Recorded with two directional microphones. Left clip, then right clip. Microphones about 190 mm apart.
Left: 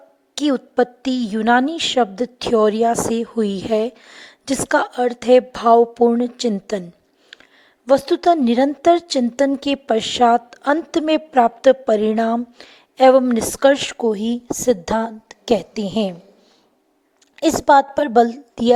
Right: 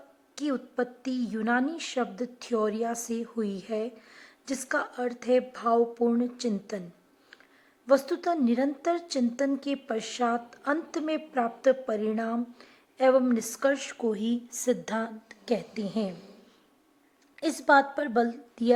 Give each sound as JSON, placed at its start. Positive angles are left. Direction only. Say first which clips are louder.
{"t": 0.3, "sound": "a woman's voice", "louder": "left 13 dB", "side_deg": 40}
{"t": 7.3, "sound": "a sound", "louder": "left 11 dB", "side_deg": 40}
{"t": 7.9, "sound": "a woman's voice", "louder": "left 10 dB", "side_deg": 35}
{"t": 17.3, "sound": "a woman's voice", "louder": "left 9 dB", "side_deg": 35}